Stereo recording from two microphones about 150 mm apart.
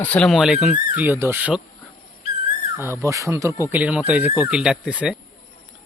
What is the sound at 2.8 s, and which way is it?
Speech, 20° right (ahead or behind).